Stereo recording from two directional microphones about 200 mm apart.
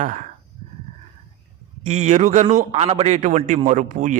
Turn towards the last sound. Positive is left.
turn(degrees=-40)  # may be behind; listen again after turning